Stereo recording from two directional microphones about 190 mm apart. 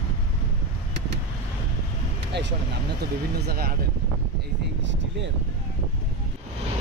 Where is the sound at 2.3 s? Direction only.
65° right (ahead or behind).